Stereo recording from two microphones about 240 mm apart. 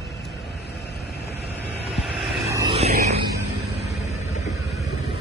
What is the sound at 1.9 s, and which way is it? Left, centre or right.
Vehicle, centre.